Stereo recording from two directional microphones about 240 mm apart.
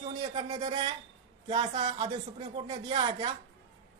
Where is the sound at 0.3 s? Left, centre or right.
Right.